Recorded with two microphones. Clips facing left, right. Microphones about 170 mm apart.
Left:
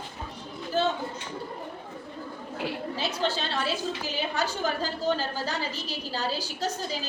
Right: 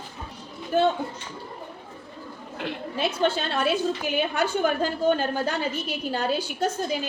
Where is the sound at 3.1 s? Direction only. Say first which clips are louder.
Right 5 dB; 55° right (ahead or behind).